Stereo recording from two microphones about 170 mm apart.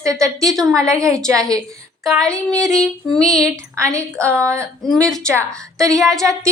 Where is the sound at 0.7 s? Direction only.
20° right (ahead or behind).